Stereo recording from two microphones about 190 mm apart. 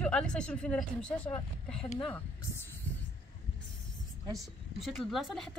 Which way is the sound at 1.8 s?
25° left (ahead or behind).